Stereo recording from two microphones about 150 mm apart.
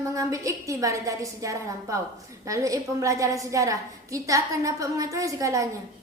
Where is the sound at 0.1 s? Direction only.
20° right (ahead or behind).